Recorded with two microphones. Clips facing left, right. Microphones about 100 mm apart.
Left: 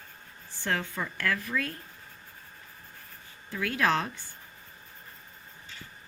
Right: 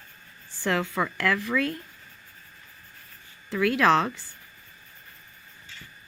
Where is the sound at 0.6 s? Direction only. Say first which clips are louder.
Right 5 dB; 90° right.